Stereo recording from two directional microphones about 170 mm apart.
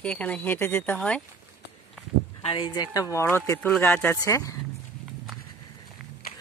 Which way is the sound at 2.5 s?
30° left (ahead or behind).